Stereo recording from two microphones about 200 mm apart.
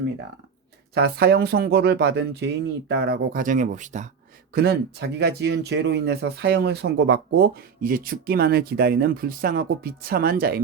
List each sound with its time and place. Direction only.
0.9 s speech: 55° right (ahead or behind); by 4.1 s 40° right (ahead or behind)
4.5 s speech: 55° right (ahead or behind)